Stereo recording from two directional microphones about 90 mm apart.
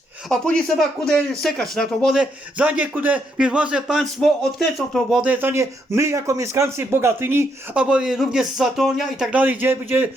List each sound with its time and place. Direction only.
0.3 s speech: 5° left (ahead or behind)
2.1 s a man's voice: 15° right (ahead or behind)
4.0 s speech: 5° left (ahead or behind)
5.2 s speech: 20° right (ahead or behind)
7.8 s speech: 10° right (ahead or behind)
9.3 s a man's voice: 20° right (ahead or behind)